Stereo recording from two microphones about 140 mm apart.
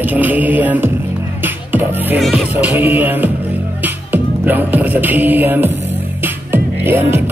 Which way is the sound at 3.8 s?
15° right (ahead or behind).